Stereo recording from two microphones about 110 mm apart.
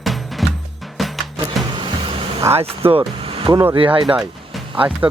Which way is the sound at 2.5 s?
65° right (ahead or behind).